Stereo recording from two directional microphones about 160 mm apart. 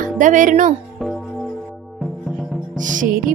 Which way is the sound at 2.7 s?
55° right (ahead or behind).